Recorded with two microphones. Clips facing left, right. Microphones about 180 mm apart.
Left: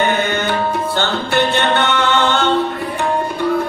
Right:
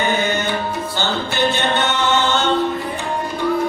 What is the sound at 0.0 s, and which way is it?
Tabla, 60° left (ahead or behind).